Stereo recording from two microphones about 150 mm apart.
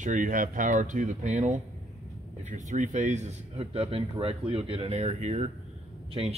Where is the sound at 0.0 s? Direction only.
60° right (ahead or behind).